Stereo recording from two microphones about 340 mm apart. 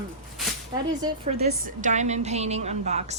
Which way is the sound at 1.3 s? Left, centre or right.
Right.